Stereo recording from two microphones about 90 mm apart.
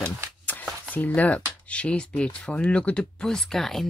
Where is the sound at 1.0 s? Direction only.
15° left (ahead or behind).